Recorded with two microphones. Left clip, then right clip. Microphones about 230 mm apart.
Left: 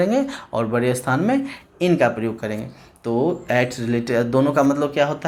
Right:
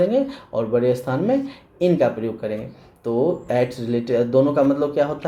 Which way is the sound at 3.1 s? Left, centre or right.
Left.